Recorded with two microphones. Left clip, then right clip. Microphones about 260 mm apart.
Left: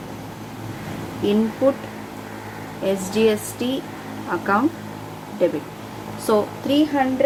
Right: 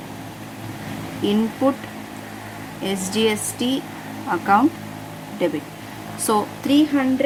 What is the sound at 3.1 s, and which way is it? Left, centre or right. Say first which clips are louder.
A woman's voice: even; right.